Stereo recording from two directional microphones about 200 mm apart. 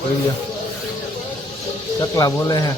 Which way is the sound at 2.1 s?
20° left (ahead or behind).